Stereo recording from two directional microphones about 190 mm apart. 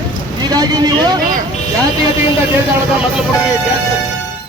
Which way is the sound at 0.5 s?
20° right (ahead or behind).